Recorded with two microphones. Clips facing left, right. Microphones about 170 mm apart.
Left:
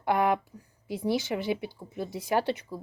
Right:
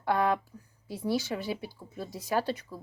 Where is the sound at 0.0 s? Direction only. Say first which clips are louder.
Left 2 dB; 20° left (ahead or behind).